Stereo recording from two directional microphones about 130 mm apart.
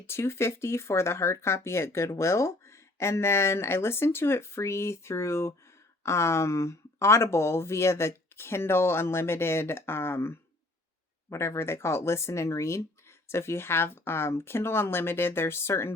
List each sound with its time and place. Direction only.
0.0 s speech: 20° left (ahead or behind)